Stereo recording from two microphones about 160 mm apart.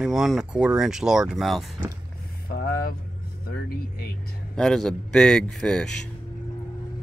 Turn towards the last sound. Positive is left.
turn(degrees=5)  # may be behind; listen again after turning